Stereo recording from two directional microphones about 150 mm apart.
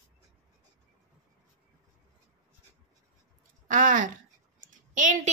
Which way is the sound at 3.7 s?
60° right (ahead or behind).